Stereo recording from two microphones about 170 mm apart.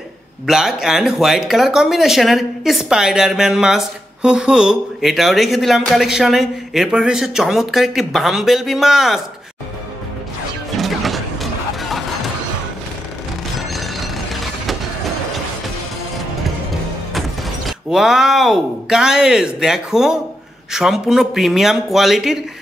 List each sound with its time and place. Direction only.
0.5 s speech: 5° right (ahead or behind)
10.8 s vehicle: centre (ahead or behind)
13.6 s a sound: centre (ahead or behind)
17.1 s speech: centre (ahead or behind)